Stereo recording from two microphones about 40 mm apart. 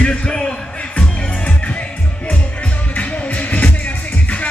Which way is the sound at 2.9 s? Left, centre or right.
Left.